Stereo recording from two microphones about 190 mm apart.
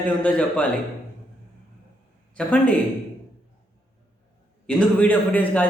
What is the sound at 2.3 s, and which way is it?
Speech, 5° left (ahead or behind).